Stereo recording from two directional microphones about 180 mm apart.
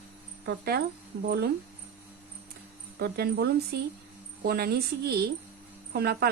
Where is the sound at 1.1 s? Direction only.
70° right (ahead or behind).